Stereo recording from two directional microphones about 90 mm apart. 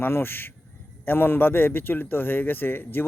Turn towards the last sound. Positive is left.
turn(degrees=25)  # may be behind; listen again after turning